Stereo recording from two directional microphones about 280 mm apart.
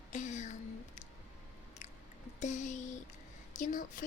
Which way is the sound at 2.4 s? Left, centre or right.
Left.